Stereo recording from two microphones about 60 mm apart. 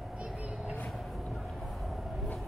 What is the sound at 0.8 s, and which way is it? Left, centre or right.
Vehicle, centre.